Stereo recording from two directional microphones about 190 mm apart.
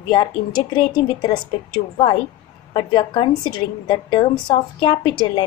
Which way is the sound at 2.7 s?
25° left (ahead or behind).